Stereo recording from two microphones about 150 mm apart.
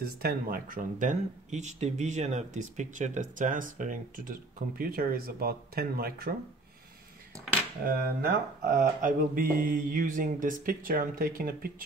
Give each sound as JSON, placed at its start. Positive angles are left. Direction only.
{"t": 0.0, "sound": "speech", "side_deg": -85}
{"t": 7.8, "sound": "speech", "side_deg": -85}